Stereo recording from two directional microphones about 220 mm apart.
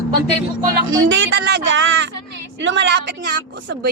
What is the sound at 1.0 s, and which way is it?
Speech, 55° right (ahead or behind).